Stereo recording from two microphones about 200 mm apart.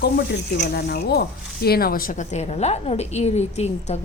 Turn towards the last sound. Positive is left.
turn(degrees=35)  # may be behind; listen again after turning